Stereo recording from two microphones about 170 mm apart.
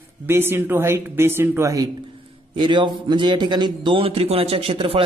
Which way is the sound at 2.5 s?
30° right (ahead or behind).